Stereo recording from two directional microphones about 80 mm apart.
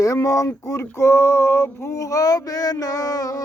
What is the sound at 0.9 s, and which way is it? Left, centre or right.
Speech, left.